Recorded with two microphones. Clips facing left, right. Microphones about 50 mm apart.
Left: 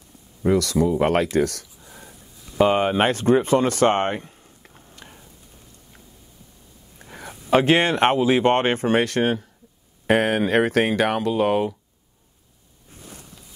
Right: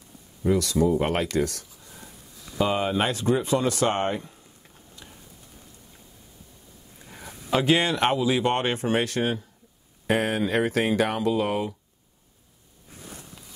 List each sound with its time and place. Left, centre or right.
0.5 s speech: left
4.4 s a sound: left
7.0 s speech: left